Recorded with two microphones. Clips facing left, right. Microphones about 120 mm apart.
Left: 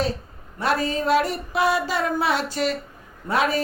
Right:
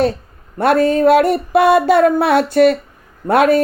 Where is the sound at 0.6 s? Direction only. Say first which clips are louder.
Right 11 dB; 55° right (ahead or behind).